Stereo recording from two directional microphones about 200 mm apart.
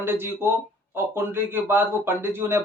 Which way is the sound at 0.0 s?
10° right (ahead or behind).